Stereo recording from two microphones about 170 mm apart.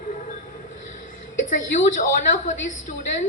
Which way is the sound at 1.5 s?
50° left (ahead or behind).